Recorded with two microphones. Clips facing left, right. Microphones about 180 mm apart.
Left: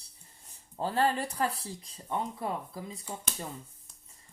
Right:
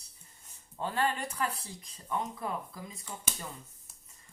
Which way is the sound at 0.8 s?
35° left (ahead or behind).